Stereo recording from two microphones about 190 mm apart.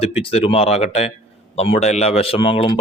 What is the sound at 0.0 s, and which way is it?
A man's voice, 30° left (ahead or behind).